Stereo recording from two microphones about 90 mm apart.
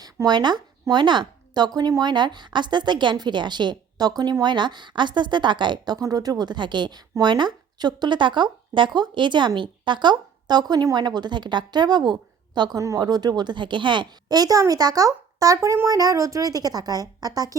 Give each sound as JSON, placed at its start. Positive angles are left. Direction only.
{"t": 0.3, "sound": "a woman's voice", "side_deg": -55}